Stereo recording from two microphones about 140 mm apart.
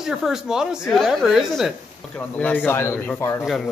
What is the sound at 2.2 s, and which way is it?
Speech, 10° left (ahead or behind).